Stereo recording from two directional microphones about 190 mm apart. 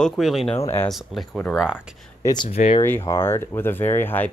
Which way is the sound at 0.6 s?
10° left (ahead or behind).